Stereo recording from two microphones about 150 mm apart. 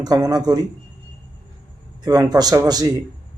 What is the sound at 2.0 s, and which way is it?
Speech, 25° right (ahead or behind).